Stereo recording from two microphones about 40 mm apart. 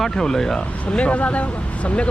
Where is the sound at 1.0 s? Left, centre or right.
Left.